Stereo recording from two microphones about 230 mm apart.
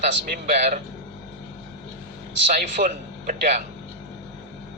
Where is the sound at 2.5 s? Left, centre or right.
Right.